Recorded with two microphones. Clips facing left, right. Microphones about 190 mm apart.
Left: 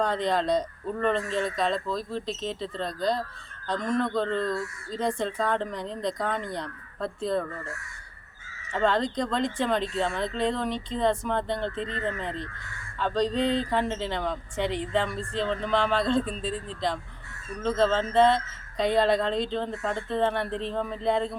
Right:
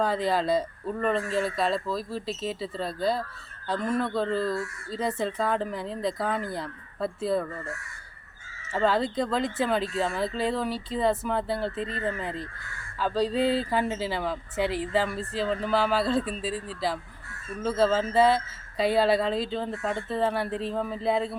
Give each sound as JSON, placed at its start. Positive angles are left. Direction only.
{"t": 0.0, "sound": "speech", "side_deg": -5}
{"t": 8.7, "sound": "speech", "side_deg": -5}